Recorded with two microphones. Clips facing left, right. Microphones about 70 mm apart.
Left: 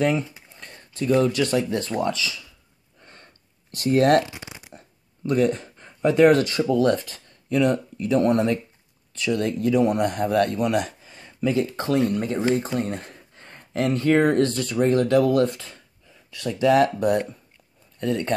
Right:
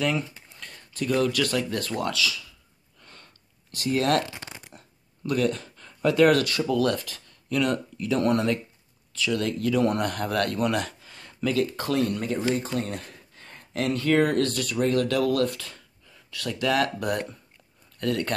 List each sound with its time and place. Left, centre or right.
0.6 s speech: left
3.0 s a sound: left
3.7 s speech: left
4.3 s shuffling cards: centre
4.7 s speech: left